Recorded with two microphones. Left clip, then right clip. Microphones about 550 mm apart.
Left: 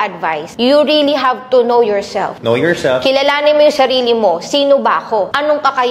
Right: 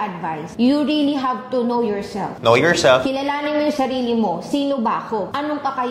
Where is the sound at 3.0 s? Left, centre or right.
Left.